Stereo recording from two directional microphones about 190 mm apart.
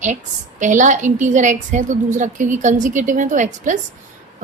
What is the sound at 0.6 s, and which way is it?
A woman's voice, 40° right (ahead or behind).